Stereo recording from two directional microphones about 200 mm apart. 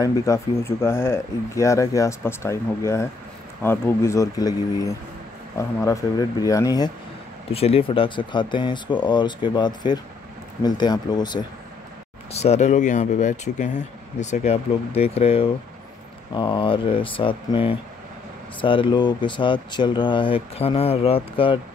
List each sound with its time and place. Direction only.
0.0 s speech: 15° left (ahead or behind)
7.5 s speech: 30° left (ahead or behind)
12.3 s speech: 30° left (ahead or behind)